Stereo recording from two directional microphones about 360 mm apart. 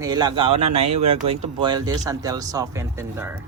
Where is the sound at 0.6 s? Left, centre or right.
Right.